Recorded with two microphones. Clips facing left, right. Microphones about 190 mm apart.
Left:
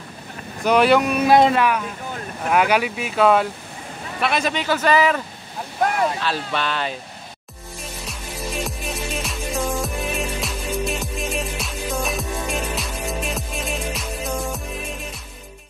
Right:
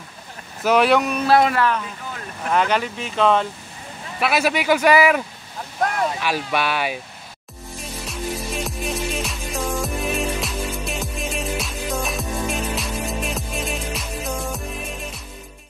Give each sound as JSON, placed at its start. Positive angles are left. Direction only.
{"t": 0.7, "sound": "speech", "side_deg": 0}
{"t": 1.2, "sound": "speech", "side_deg": 20}
{"t": 2.5, "sound": "speech", "side_deg": 10}
{"t": 4.2, "sound": "a man's voice", "side_deg": -5}
{"t": 6.2, "sound": "a man's voice", "side_deg": -10}
{"t": 8.6, "sound": "music", "side_deg": 0}